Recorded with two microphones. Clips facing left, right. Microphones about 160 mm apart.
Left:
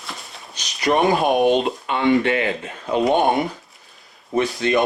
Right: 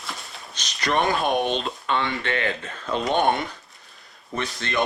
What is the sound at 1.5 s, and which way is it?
Speech, 60° left (ahead or behind).